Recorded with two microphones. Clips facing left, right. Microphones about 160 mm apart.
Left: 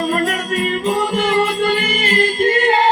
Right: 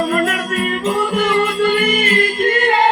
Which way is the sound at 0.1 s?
35° left (ahead or behind).